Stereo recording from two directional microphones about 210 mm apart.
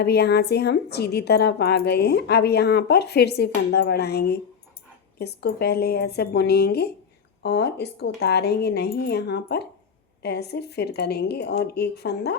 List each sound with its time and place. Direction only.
0.0 s a woman's voice: 50° left (ahead or behind)